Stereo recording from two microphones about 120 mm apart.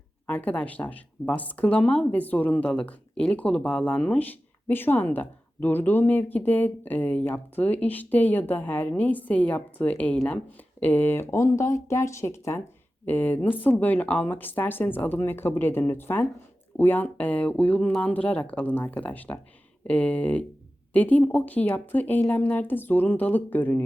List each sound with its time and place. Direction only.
0.3 s speech: 10° left (ahead or behind)